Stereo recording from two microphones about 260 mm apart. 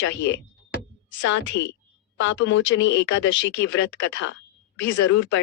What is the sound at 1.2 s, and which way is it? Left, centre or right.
Speech, left.